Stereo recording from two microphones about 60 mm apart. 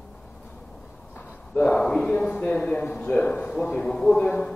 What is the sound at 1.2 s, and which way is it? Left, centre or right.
A man's voice, left.